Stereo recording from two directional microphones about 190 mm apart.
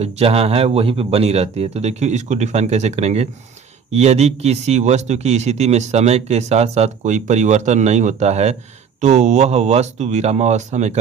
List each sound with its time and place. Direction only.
0.0 s a man's voice: 30° right (ahead or behind)